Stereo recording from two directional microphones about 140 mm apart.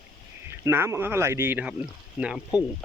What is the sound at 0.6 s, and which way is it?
Speech, 20° right (ahead or behind).